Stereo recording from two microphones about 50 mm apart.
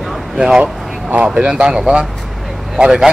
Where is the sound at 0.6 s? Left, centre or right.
Right.